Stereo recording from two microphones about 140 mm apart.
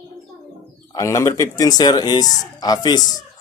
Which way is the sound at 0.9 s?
20° left (ahead or behind).